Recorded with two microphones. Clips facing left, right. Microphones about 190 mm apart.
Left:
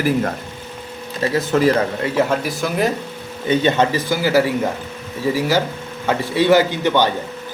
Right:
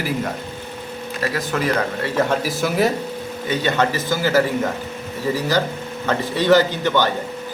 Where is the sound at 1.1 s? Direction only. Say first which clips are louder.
Left 6 dB; 25° left (ahead or behind).